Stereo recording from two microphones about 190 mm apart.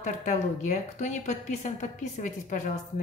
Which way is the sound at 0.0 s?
40° left (ahead or behind).